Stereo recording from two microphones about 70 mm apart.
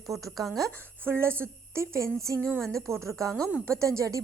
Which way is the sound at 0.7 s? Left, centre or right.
Left.